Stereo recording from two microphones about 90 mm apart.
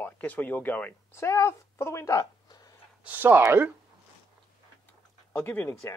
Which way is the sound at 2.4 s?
50° left (ahead or behind).